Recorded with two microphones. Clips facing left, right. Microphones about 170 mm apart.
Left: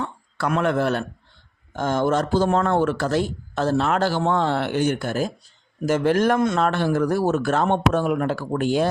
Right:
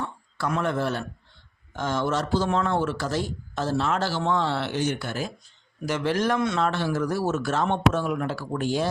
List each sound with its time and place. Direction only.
0.0 s speech: 65° left (ahead or behind)
1.7 s speech: 50° left (ahead or behind)